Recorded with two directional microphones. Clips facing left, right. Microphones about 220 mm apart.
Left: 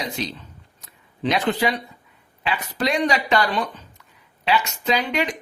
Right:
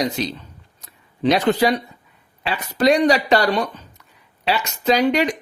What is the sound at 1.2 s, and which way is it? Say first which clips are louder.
Speech: right 5 dB; 40° right (ahead or behind).